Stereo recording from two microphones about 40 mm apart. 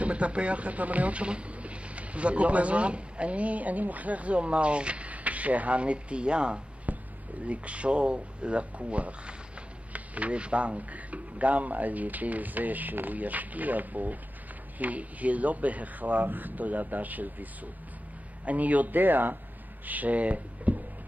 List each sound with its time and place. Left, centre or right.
0.0 s speech: right
6.9 s a sound: right
7.4 s speech: right
19.9 s speech: right